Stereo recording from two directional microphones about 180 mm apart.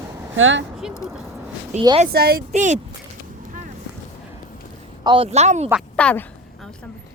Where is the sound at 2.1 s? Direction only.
60° right (ahead or behind).